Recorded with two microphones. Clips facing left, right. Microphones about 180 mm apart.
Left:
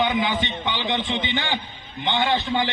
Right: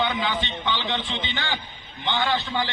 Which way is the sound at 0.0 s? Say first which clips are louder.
Left 3 dB; 15° left (ahead or behind).